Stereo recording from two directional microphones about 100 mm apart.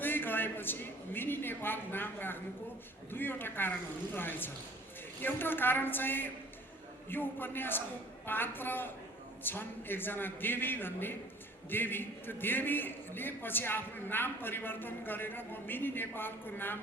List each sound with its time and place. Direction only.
0.0 s a man's voice: 20° left (ahead or behind)